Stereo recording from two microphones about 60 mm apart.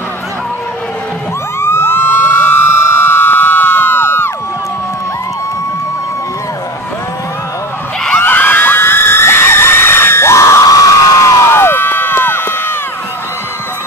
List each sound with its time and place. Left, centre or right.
1.6 s emergency vehicle: left
8.2 s screaming: left
11.4 s crowd: left